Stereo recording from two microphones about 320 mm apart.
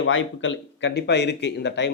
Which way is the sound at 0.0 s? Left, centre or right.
Left.